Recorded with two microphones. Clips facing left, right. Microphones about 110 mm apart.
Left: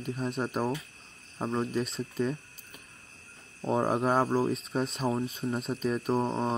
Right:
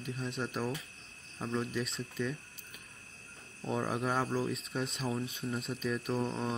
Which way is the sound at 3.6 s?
40° left (ahead or behind).